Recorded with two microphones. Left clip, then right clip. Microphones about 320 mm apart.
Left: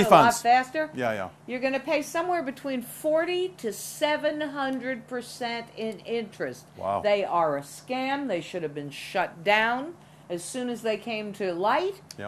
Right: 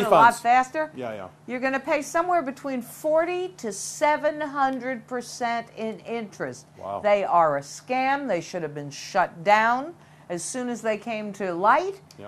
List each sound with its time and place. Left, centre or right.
0.4 s a woman's voice: right
0.9 s speech: left
1.5 s a woman's voice: right